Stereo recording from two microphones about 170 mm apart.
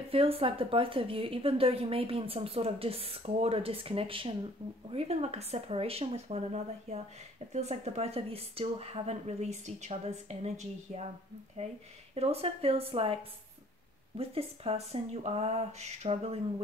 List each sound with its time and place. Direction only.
0.1 s a woman's voice: 35° right (ahead or behind)
12.2 s a woman's voice: 35° right (ahead or behind)